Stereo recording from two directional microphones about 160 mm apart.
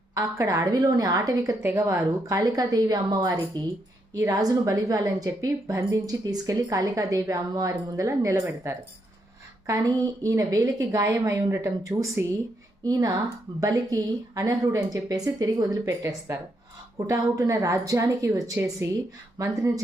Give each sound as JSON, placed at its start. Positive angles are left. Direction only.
{"t": 0.1, "sound": "a woman's voice", "side_deg": -20}
{"t": 10.2, "sound": "a woman's voice", "side_deg": -20}